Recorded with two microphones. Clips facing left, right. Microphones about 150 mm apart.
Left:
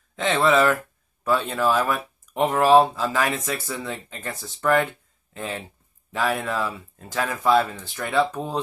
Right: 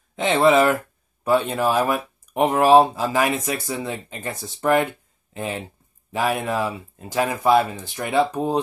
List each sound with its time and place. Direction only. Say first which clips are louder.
0.1 s speech: right 3 dB; 20° right (ahead or behind)